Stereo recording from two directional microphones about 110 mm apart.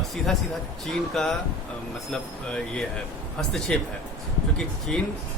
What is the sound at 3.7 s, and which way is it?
Speech, 5° left (ahead or behind).